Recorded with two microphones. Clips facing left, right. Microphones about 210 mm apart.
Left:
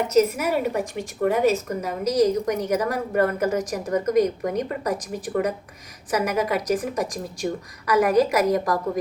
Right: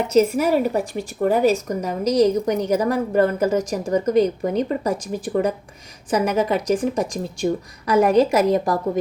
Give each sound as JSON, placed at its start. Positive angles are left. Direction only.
{"t": 0.1, "sound": "a woman's voice", "side_deg": -30}